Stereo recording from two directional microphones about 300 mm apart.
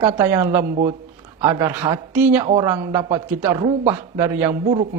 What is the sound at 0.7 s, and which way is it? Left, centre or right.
Speech, right.